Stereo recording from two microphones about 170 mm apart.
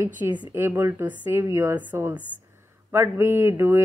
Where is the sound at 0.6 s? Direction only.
15° right (ahead or behind).